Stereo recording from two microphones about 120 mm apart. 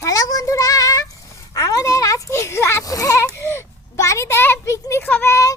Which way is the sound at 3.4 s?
20° left (ahead or behind).